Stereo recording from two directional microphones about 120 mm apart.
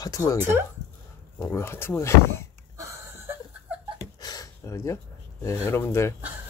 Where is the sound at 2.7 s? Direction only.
25° right (ahead or behind).